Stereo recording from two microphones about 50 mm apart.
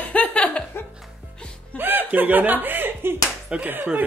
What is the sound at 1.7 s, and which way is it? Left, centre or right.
Speech, right.